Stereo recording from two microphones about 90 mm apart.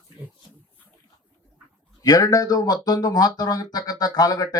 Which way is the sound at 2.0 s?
45° left (ahead or behind).